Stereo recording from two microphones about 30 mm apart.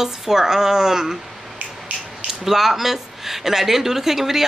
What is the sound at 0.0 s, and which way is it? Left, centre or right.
Speech, centre.